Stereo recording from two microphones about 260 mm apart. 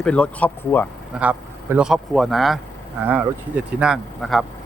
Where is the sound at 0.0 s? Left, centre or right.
Centre.